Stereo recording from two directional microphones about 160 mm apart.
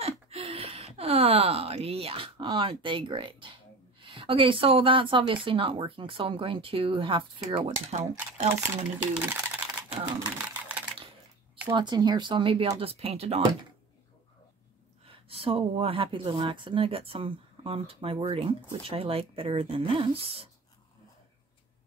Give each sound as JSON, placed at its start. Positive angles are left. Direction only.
{"t": 0.0, "sound": "a sound", "side_deg": -35}
{"t": 4.0, "sound": "speech", "side_deg": -30}
{"t": 7.4, "sound": "speech", "side_deg": -45}
{"t": 9.3, "sound": "typing", "side_deg": -10}
{"t": 11.6, "sound": "speech", "side_deg": -30}
{"t": 15.0, "sound": "speech", "side_deg": -35}